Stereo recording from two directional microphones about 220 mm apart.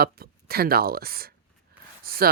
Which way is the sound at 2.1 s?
40° right (ahead or behind).